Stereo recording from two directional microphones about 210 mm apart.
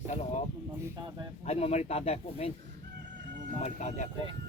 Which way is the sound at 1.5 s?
30° left (ahead or behind).